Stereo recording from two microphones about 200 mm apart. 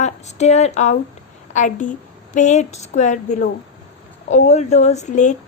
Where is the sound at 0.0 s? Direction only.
35° left (ahead or behind).